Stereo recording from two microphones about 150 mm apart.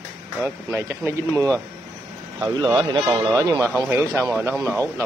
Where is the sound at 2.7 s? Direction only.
30° right (ahead or behind).